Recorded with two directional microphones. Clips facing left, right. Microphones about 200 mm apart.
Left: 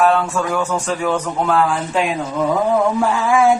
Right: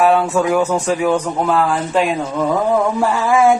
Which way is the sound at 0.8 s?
10° right (ahead or behind).